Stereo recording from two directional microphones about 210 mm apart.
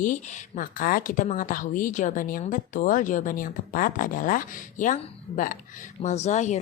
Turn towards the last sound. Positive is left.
turn(degrees=35)  # may be behind; listen again after turning